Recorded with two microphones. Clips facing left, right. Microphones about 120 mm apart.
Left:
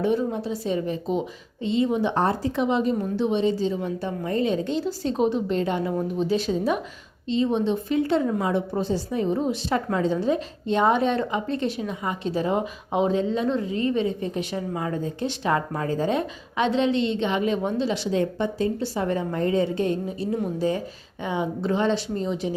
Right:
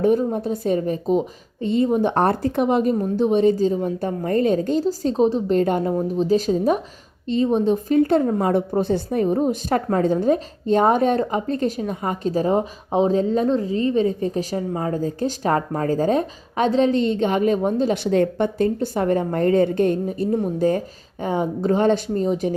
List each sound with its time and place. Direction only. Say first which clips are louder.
0.0 s a woman's voice: right 5 dB; 45° right (ahead or behind)
5.9 s speech: right 4 dB; 30° right (ahead or behind)
6.2 s a woman's voice: right 6 dB; 40° right (ahead or behind)